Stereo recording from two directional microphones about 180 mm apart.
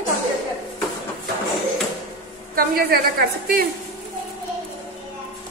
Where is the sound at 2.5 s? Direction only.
55° right (ahead or behind).